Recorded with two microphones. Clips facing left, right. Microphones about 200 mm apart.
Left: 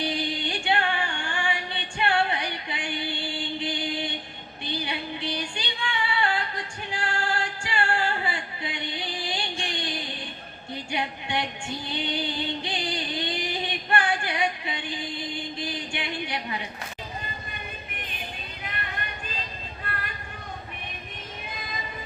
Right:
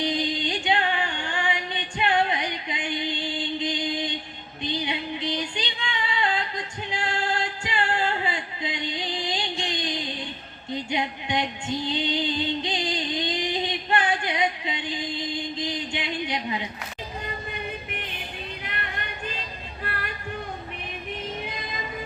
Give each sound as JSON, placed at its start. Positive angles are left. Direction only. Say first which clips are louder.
{"t": 0.0, "sound": "music", "louder": "right 3 dB", "side_deg": -20}
{"t": 4.6, "sound": "female singing", "louder": "right 3 dB", "side_deg": -20}
{"t": 10.9, "sound": "a sound", "louder": "right 1 dB", "side_deg": -20}
{"t": 11.9, "sound": "music", "louder": "right 2 dB", "side_deg": -20}